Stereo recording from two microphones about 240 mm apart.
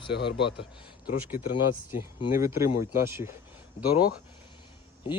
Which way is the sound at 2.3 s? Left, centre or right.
Centre.